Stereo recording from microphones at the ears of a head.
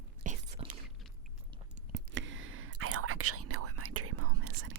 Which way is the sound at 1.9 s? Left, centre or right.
Right.